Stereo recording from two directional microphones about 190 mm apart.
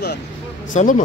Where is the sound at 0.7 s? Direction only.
45° left (ahead or behind).